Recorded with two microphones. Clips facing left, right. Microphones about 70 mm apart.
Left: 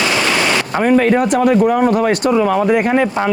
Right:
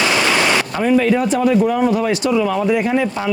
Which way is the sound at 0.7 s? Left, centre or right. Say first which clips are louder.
Left 5 dB; left.